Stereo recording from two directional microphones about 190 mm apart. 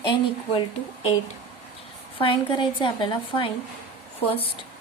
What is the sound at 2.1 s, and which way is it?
A woman's voice, 25° left (ahead or behind).